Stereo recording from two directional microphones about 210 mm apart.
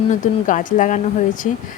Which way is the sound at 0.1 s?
35° left (ahead or behind).